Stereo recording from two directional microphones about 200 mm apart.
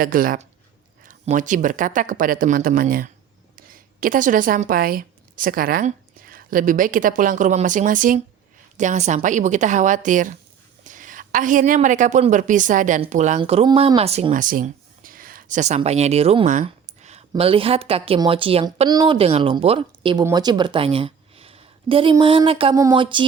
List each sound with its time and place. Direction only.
0.0 s a woman's voice: 45° right (ahead or behind)
13.4 s a woman's voice: 25° right (ahead or behind)